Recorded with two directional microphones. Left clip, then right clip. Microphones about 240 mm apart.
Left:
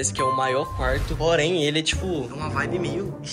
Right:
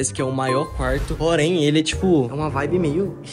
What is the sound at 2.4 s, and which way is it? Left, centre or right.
Speech, centre.